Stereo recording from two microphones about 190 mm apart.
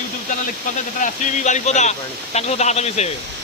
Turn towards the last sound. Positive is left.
turn(degrees=35)  # may be behind; listen again after turning